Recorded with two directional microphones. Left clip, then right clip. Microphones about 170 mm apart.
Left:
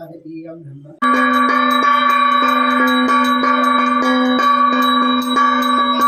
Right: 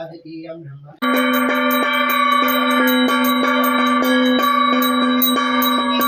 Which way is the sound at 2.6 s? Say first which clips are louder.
Left 2 dB; 10° right (ahead or behind).